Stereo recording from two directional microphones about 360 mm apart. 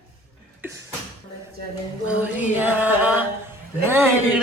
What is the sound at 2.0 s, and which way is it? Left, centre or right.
A man's voice, centre.